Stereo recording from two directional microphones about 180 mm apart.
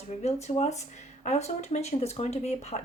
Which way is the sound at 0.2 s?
40° left (ahead or behind).